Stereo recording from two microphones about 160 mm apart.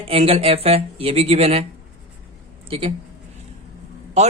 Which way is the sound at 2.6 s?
35° right (ahead or behind).